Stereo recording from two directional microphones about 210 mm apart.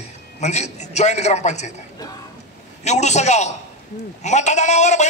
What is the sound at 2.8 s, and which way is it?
A man's voice, 35° left (ahead or behind).